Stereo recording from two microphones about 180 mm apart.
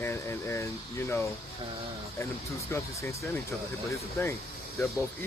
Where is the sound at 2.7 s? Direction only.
15° left (ahead or behind).